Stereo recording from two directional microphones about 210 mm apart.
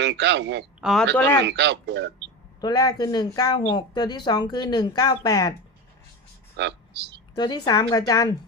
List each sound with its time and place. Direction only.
0.0 s speech: 55° right (ahead or behind)
0.8 s a man's voice: centre (ahead or behind)
1.5 s speech: 55° right (ahead or behind)
2.6 s speech: 20° left (ahead or behind)
6.6 s speech: 55° right (ahead or behind)
7.3 s speech: 20° left (ahead or behind)